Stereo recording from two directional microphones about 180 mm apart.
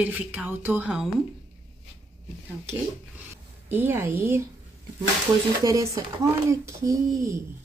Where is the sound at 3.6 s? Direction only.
10° right (ahead or behind).